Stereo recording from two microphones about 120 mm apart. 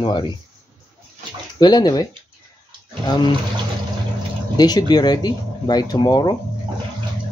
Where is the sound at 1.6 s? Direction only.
35° left (ahead or behind).